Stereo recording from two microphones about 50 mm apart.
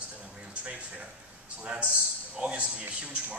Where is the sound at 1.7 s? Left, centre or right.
Right.